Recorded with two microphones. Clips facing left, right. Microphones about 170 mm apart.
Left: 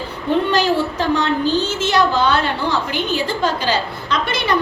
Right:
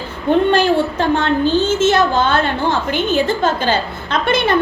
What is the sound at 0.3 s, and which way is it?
A woman's voice, 55° right (ahead or behind).